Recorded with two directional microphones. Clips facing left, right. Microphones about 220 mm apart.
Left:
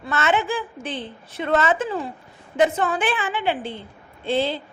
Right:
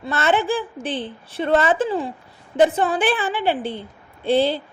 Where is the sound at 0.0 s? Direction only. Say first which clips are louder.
Right 2 dB; 35° right (ahead or behind).